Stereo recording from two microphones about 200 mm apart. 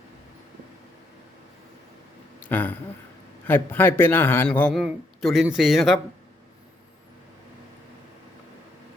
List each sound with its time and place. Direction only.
2.4 s a man's voice: 10° left (ahead or behind)